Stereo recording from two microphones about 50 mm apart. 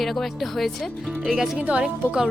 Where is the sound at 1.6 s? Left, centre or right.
Right.